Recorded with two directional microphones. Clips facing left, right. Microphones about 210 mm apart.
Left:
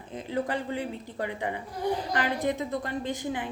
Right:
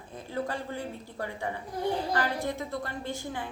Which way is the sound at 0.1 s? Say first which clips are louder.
Left 4 dB; 20° left (ahead or behind).